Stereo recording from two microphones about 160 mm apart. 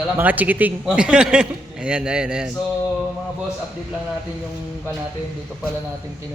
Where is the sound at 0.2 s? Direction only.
10° right (ahead or behind).